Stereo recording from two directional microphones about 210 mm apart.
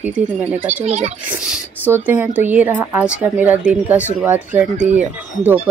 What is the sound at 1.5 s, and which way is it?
Speech, 10° right (ahead or behind).